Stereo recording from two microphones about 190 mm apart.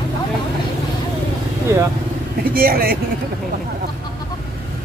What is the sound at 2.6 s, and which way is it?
Speech, 50° right (ahead or behind).